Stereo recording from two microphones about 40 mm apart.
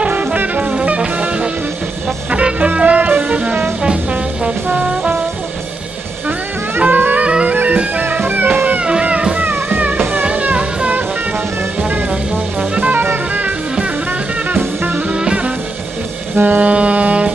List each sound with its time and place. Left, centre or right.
0.1 s music: right
2.3 s music: right
3.8 s brass instrument: right
6.8 s music: right
7.2 s music: right
7.5 s bagpipes: right
8.0 s music: right
10.2 s music: right
12.9 s music: right
14.5 s music: right
15.0 s music: right
16.3 s music: right